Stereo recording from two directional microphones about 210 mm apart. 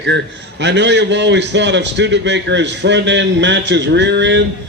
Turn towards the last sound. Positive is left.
turn(degrees=-55)  # may be behind; listen again after turning